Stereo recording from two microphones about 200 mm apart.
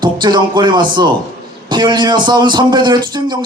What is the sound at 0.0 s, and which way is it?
A man's voice, 20° right (ahead or behind).